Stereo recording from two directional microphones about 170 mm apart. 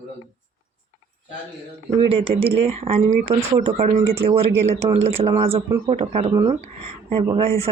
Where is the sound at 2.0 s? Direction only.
35° right (ahead or behind).